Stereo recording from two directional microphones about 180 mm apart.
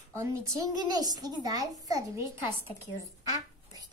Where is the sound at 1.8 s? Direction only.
15° right (ahead or behind).